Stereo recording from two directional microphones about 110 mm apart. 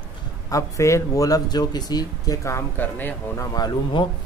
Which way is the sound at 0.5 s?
30° left (ahead or behind).